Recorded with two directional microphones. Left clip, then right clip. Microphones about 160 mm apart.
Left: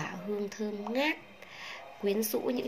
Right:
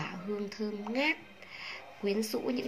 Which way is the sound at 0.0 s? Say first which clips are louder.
Left 2 dB; 5° right (ahead or behind).